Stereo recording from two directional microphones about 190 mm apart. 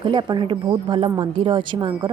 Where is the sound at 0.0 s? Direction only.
25° right (ahead or behind).